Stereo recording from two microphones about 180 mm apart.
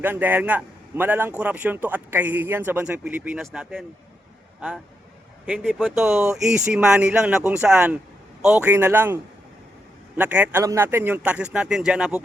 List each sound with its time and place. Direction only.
0.0 s a man's voice: 10° right (ahead or behind)
5.5 s a man's voice: centre (ahead or behind)